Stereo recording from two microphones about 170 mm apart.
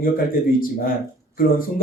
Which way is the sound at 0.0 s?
60° left (ahead or behind).